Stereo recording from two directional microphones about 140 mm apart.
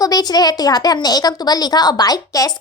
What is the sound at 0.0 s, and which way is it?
A woman's voice, 25° left (ahead or behind).